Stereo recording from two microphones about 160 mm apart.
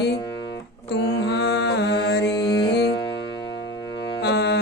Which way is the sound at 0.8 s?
90° left.